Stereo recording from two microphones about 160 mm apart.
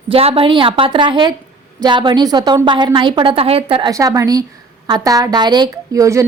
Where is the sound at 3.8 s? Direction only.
20° right (ahead or behind).